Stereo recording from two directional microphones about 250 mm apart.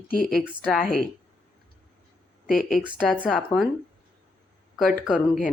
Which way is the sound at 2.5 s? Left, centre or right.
Left.